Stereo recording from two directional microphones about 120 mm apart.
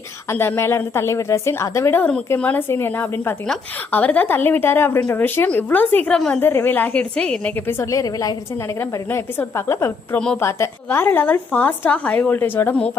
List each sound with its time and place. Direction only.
0.3 s a woman's voice: 20° left (ahead or behind)
6.4 s a woman's voice: 20° left (ahead or behind)
8.8 s a woman's voice: 20° left (ahead or behind)